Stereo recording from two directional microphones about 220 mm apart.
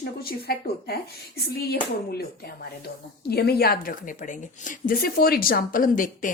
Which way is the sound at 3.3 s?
45° left (ahead or behind).